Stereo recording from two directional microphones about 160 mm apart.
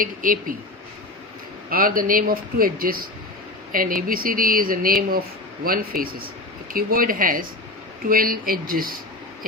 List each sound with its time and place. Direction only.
0.0 s speech: 60° right (ahead or behind)
1.7 s speech: 65° right (ahead or behind)